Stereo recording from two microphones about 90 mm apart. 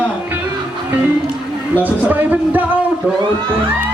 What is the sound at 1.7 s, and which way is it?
Speech, 20° right (ahead or behind).